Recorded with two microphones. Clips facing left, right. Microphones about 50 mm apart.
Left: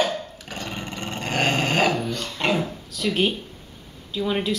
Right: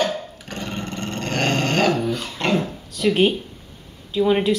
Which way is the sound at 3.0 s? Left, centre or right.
Centre.